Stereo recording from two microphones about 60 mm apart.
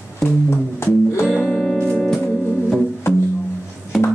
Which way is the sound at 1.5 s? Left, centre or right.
Centre.